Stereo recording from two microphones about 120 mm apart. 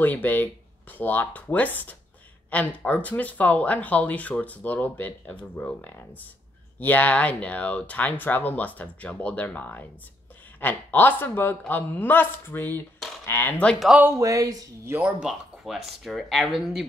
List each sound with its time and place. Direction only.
0.0 s speech: 15° left (ahead or behind)
13.9 s speech: 15° right (ahead or behind)
14.2 s speech: 30° right (ahead or behind)
15.0 s speech: 10° right (ahead or behind)